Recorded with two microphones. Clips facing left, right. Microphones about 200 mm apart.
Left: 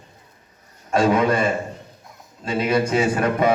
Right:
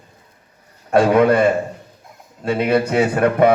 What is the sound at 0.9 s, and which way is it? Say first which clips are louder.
A man's voice: right 5 dB; 60° right (ahead or behind).